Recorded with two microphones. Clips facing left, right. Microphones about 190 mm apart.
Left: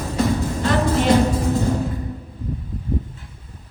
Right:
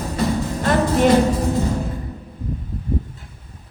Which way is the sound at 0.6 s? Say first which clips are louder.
Right 4 dB; 50° right (ahead or behind).